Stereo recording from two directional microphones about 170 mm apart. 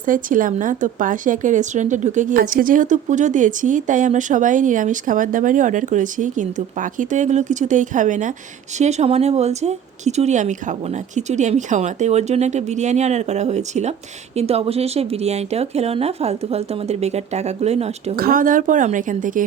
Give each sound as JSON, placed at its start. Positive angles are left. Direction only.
{"t": 0.0, "sound": "speech", "side_deg": -55}
{"t": 18.2, "sound": "speech", "side_deg": -55}